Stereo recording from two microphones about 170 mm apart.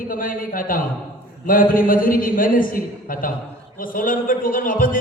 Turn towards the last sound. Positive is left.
turn(degrees=55)  # may be behind; listen again after turning